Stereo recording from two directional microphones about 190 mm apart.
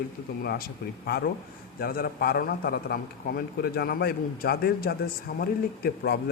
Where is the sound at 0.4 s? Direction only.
55° left (ahead or behind).